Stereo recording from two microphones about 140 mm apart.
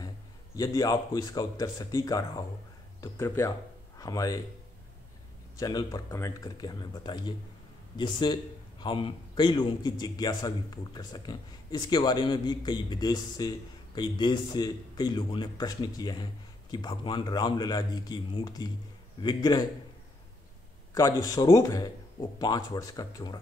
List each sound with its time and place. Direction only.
0.6 s speech: 25° left (ahead or behind)
5.6 s a man's voice: 25° left (ahead or behind)
20.9 s speech: 25° left (ahead or behind)